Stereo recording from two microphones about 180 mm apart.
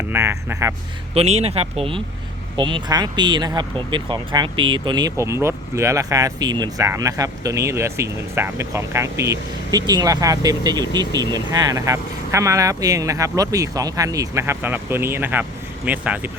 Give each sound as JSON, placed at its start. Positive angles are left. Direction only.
{"t": 0.1, "sound": "speech", "side_deg": -10}
{"t": 1.1, "sound": "speech", "side_deg": -35}